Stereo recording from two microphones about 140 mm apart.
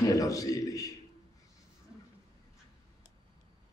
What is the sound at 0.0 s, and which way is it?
Speech, 25° left (ahead or behind).